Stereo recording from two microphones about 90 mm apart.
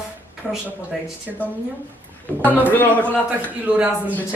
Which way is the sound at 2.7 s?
20° left (ahead or behind).